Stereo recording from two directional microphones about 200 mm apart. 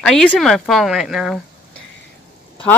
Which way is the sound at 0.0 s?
5° left (ahead or behind).